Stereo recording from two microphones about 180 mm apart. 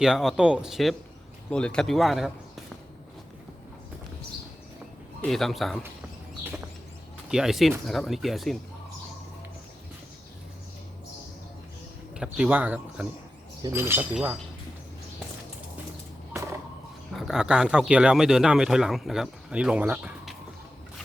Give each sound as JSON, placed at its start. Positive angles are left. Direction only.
{"t": 0.0, "sound": "speech", "side_deg": 0}
{"t": 5.2, "sound": "speech", "side_deg": 0}
{"t": 7.3, "sound": "speech", "side_deg": -5}
{"t": 12.1, "sound": "speech", "side_deg": -5}
{"t": 16.3, "sound": "a sound", "side_deg": -15}
{"t": 17.2, "sound": "speech", "side_deg": 0}